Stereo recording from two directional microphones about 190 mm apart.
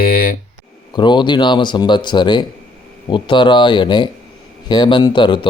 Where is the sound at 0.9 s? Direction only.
25° left (ahead or behind).